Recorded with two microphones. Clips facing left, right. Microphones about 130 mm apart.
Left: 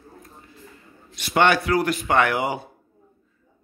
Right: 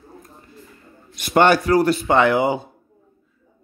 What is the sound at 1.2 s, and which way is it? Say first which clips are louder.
Speech: right 4 dB; 45° right (ahead or behind).